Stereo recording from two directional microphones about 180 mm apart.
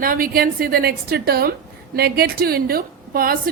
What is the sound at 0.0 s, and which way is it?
A woman's voice, 55° right (ahead or behind).